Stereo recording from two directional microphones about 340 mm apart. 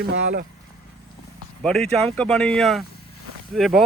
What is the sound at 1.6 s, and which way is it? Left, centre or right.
Speech, centre.